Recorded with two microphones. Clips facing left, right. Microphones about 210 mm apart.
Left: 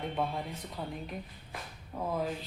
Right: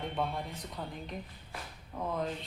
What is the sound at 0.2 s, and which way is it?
A woman's voice, 5° left (ahead or behind).